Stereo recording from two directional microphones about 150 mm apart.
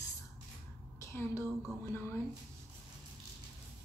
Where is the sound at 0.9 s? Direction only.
20° left (ahead or behind).